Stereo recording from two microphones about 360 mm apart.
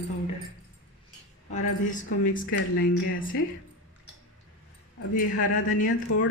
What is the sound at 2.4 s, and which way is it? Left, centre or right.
Speech, left.